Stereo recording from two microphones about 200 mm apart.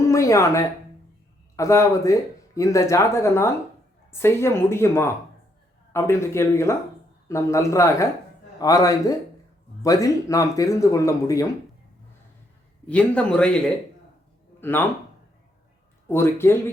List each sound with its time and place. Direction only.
0.1 s speech: 15° left (ahead or behind)
12.9 s a man's voice: 5° left (ahead or behind)
14.6 s speech: 10° left (ahead or behind)
16.0 s speech: 10° left (ahead or behind)